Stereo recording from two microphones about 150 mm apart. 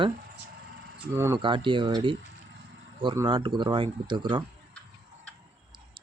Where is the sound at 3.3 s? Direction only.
35° right (ahead or behind).